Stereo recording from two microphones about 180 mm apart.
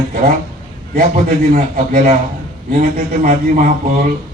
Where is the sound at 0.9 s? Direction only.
50° right (ahead or behind).